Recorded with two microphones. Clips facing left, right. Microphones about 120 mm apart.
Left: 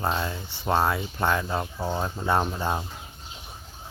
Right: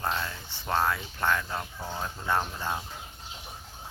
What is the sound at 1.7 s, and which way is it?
Speech, 35° left (ahead or behind).